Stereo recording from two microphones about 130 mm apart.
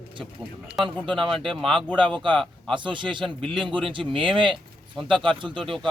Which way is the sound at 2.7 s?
40° right (ahead or behind).